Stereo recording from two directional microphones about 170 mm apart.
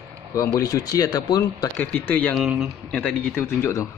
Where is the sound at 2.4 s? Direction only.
5° right (ahead or behind); by 3.8 s 15° left (ahead or behind).